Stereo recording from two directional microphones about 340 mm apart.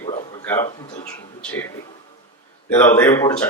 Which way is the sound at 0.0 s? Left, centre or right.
Centre.